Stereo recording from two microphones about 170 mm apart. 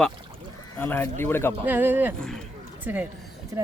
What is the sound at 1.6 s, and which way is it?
Speech, 10° right (ahead or behind).